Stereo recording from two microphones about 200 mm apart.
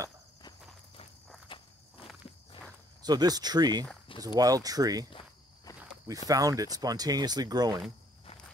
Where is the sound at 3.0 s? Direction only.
20° right (ahead or behind).